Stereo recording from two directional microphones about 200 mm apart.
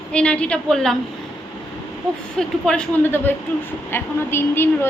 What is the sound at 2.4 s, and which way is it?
A woman's voice, 5° left (ahead or behind).